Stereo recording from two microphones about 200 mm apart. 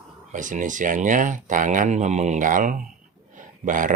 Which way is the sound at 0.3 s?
40° right (ahead or behind).